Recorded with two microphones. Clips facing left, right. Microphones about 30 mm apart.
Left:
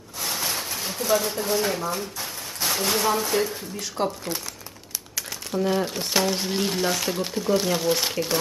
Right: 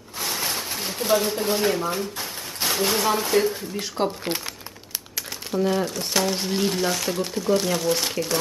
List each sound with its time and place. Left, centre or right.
0.2 s a sound: centre
1.1 s speech: centre
2.6 s a sound: centre
2.9 s speech: centre; by 4.1 s right
5.5 s speech: centre
5.9 s speech: centre
6.2 s speech: centre